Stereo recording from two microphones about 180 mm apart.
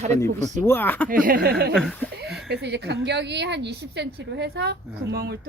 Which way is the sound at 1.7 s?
Centre (ahead or behind).